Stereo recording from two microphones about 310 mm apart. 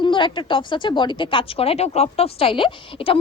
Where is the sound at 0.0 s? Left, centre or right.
Centre.